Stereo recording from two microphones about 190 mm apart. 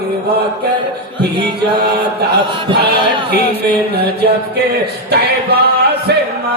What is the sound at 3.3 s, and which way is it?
Speech, 55° right (ahead or behind).